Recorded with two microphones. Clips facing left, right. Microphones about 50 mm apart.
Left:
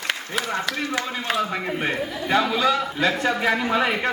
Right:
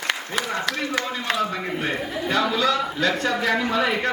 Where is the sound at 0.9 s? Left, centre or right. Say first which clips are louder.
Even; centre.